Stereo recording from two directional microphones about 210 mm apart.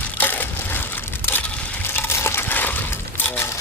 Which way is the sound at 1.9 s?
10° left (ahead or behind).